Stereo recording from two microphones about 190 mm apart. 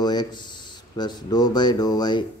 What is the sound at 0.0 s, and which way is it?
Speech, 20° left (ahead or behind).